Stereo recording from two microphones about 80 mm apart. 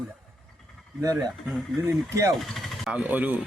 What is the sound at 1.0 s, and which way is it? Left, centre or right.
Speech, right.